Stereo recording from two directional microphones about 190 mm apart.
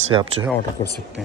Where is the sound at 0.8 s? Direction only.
20° left (ahead or behind).